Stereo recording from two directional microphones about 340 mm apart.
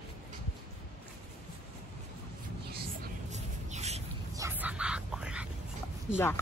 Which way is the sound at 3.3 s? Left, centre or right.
Centre.